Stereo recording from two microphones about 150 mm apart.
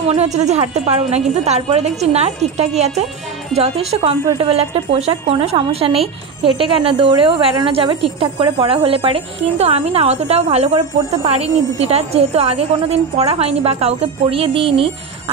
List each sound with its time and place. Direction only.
0.0 s speech: 45° right (ahead or behind)